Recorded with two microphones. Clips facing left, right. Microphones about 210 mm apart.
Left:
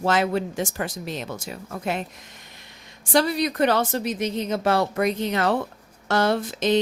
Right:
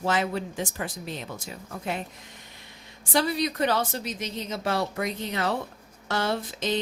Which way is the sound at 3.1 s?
65° left (ahead or behind).